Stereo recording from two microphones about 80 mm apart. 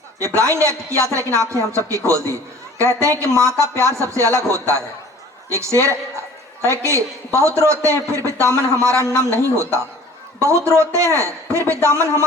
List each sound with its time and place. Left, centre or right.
0.2 s speech: right